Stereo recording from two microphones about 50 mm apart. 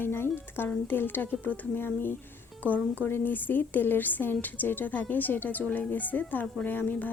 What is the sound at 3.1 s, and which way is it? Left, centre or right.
A woman's voice, left.